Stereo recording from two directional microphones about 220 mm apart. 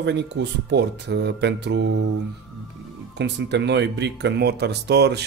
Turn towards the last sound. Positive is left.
turn(degrees=-50)  # may be behind; listen again after turning